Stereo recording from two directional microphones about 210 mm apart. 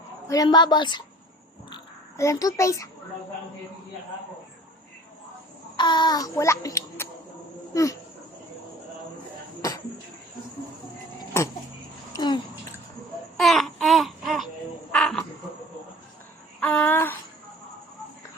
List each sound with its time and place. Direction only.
0.3 s a woman's voice: 20° left (ahead or behind)
5.7 s a child's voice: 20° left (ahead or behind)
7.7 s dog: 15° left (ahead or behind)
9.6 s a sound: 15° left (ahead or behind)
12.1 s babbling: 20° left (ahead or behind)
13.3 s babbling: centre (ahead or behind)
14.9 s cricket: 5° left (ahead or behind)
16.6 s a sound: 5° left (ahead or behind)